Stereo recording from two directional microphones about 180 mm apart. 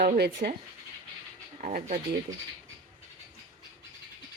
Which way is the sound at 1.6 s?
50° right (ahead or behind).